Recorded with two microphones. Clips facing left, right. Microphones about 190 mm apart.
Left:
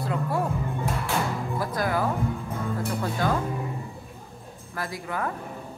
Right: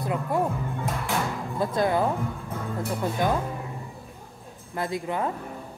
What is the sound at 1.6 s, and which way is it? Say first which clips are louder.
Speech: right 4 dB; 25° right (ahead or behind).